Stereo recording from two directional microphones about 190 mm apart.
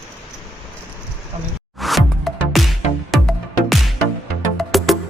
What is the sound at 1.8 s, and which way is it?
Music, centre (ahead or behind).